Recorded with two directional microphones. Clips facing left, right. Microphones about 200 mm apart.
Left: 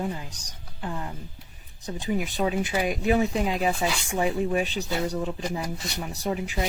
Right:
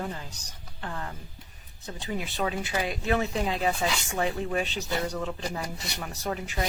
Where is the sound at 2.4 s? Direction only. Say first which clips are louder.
Left 4 dB; 15° left (ahead or behind).